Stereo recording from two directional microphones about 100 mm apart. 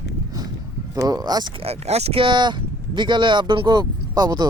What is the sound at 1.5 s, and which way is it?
Speech, 90° right.